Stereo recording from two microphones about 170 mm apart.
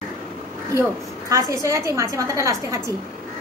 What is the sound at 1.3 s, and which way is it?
A woman's voice, 20° right (ahead or behind).